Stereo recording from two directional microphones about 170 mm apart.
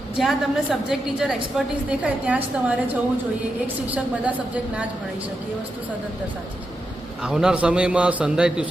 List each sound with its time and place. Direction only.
0.2 s a man's voice: centre (ahead or behind)
7.2 s a man's voice: 5° right (ahead or behind)